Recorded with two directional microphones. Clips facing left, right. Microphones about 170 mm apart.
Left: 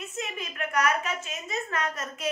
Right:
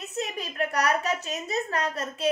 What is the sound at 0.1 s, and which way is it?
A woman's voice, 35° right (ahead or behind).